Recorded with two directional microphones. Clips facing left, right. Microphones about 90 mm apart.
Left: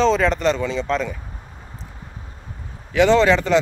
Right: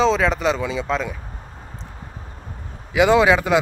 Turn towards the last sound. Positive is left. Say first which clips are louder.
# even
turn(degrees=-10)  # may be behind; listen again after turning